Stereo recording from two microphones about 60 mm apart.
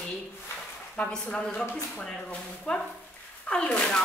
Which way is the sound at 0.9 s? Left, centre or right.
Centre.